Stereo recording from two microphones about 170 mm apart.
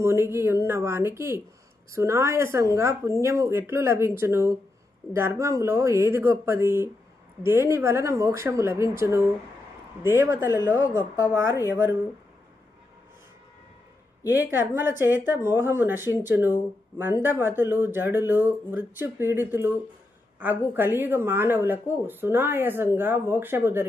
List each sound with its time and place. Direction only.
0.0 s speech: 15° right (ahead or behind)
14.3 s speech: 10° right (ahead or behind)